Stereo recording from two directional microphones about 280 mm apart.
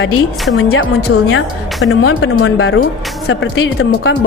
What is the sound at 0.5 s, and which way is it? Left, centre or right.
Speech, left.